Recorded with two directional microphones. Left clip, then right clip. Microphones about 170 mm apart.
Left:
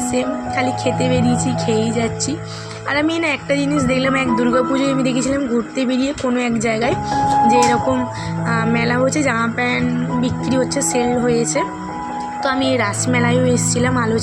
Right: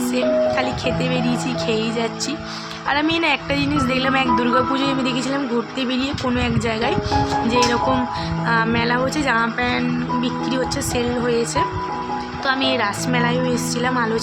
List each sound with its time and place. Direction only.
0.1 s a woman's voice: 15° left (ahead or behind)